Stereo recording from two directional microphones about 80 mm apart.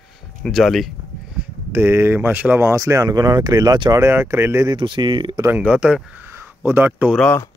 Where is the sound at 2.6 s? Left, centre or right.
Right.